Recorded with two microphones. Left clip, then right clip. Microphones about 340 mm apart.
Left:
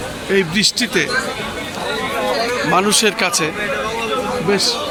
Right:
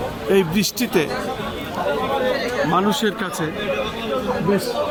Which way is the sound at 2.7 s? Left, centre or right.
Centre.